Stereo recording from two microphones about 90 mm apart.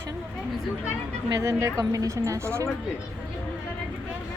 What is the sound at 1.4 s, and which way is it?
Speech, 30° right (ahead or behind).